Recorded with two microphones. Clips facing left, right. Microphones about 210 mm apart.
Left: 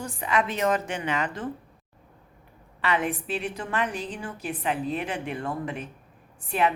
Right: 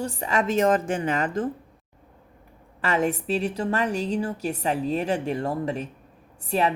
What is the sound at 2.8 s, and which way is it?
A woman's voice, 45° right (ahead or behind).